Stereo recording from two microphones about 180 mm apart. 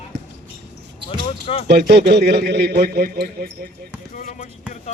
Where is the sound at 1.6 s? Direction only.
65° right (ahead or behind).